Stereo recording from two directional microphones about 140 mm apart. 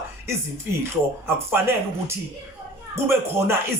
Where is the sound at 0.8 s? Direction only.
15° right (ahead or behind).